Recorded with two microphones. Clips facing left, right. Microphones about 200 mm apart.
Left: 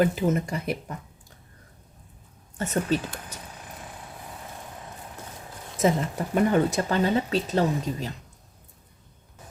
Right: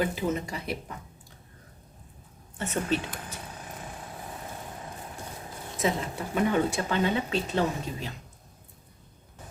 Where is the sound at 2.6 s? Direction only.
40° left (ahead or behind).